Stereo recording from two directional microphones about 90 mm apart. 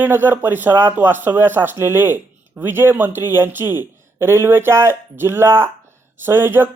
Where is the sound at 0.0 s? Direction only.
25° right (ahead or behind).